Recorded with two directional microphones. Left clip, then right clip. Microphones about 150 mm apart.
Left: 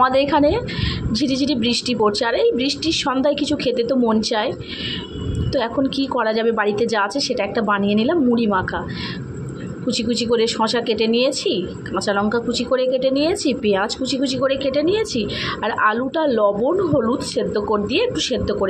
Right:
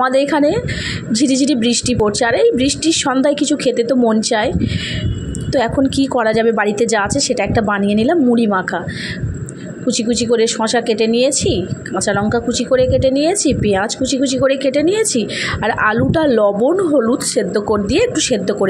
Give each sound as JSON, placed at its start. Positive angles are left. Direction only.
{"t": 0.0, "sound": "a woman's voice", "side_deg": -35}
{"t": 9.8, "sound": "a woman's voice", "side_deg": -35}